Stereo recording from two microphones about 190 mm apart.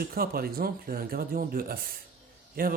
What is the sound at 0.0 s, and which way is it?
Speech, 50° right (ahead or behind).